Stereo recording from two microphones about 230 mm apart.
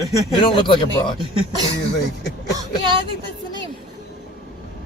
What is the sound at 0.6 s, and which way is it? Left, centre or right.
Speech, centre.